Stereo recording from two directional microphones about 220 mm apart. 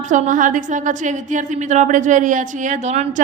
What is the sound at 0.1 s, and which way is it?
A woman's voice, 35° right (ahead or behind).